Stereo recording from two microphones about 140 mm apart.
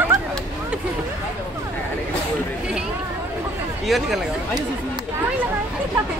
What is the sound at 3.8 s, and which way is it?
Speech, centre (ahead or behind).